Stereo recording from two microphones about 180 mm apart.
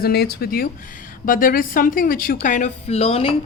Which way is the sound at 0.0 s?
60° left (ahead or behind).